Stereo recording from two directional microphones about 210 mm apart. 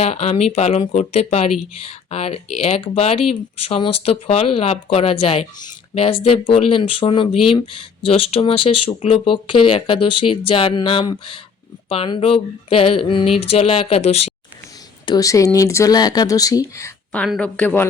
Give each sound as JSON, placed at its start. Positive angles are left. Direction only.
{"t": 0.0, "sound": "speech", "side_deg": 30}
{"t": 15.0, "sound": "a woman's voice", "side_deg": 20}